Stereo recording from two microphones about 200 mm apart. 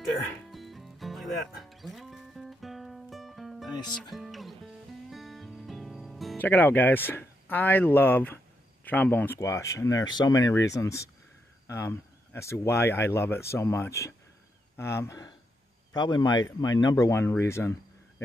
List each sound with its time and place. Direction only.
0.5 s music: centre (ahead or behind)
8.8 s speech: 10° left (ahead or behind)